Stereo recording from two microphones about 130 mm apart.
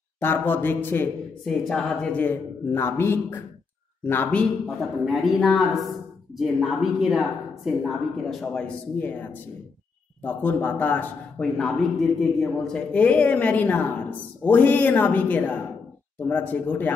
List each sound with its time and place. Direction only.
0.2 s a man's voice: 15° left (ahead or behind)
1.4 s a man's voice: 5° left (ahead or behind)
4.6 s a man's voice: centre (ahead or behind)